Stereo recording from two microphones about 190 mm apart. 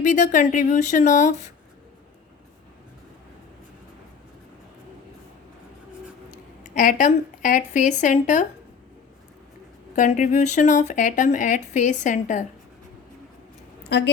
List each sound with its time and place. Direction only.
0.0 s speech: 40° left (ahead or behind)
6.3 s a woman's voice: 45° left (ahead or behind)
9.9 s speech: 40° left (ahead or behind)